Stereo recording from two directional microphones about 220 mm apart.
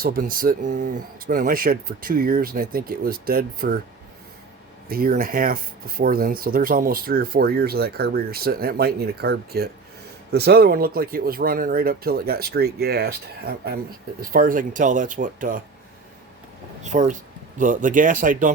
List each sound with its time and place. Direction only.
0.0 s speech: 40° right (ahead or behind)
4.9 s speech: 40° right (ahead or behind)
16.8 s speech: 35° right (ahead or behind)